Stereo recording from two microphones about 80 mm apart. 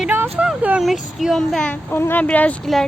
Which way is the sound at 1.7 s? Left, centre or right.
Left.